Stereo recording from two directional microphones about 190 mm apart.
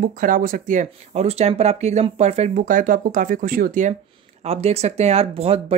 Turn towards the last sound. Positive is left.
turn(degrees=-30)  # may be behind; listen again after turning